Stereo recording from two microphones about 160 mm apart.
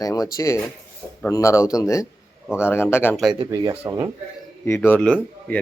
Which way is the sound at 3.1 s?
Centre (ahead or behind).